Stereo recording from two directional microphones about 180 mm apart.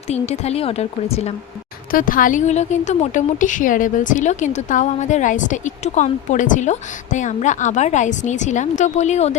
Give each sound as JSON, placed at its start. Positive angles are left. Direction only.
{"t": 0.1, "sound": "a woman's voice", "side_deg": 35}
{"t": 1.9, "sound": "a woman's voice", "side_deg": 50}